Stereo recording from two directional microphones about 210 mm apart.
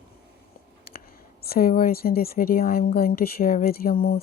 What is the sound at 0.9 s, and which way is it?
A woman's voice, 45° left (ahead or behind).